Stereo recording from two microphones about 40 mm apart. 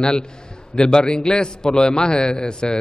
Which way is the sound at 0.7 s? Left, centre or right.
Left.